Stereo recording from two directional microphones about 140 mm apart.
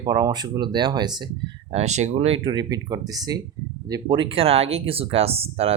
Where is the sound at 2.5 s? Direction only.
25° right (ahead or behind); by 5.7 s 45° right (ahead or behind).